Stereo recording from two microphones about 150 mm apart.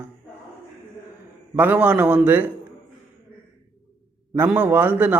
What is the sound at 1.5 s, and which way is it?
Speech, 10° right (ahead or behind).